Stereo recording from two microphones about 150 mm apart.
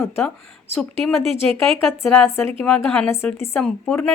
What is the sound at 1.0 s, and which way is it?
Speech, centre (ahead or behind).